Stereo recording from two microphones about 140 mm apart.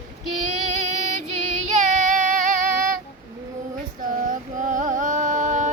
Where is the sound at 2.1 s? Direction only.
65° right (ahead or behind).